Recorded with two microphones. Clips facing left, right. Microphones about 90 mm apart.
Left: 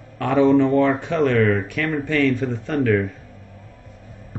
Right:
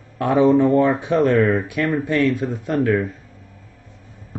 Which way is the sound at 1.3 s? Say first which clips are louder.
Even; 30° right (ahead or behind).